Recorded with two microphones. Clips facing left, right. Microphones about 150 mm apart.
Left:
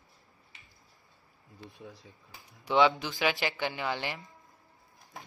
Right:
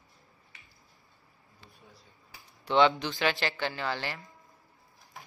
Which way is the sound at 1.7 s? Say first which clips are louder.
Left 9 dB; 90° left.